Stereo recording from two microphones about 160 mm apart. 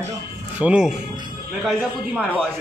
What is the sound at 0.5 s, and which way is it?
A man's voice, 5° right (ahead or behind).